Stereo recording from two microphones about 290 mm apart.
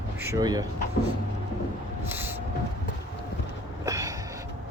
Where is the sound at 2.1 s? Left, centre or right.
Centre.